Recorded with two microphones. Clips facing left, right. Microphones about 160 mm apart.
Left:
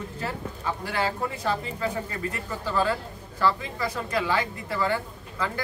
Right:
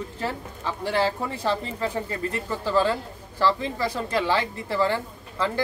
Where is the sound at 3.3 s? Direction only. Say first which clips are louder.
Right 2 dB; 30° right (ahead or behind).